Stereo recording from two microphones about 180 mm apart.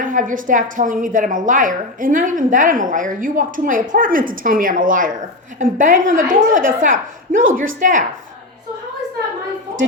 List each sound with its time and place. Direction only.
0.0 s a woman's voice: 45° right (ahead or behind)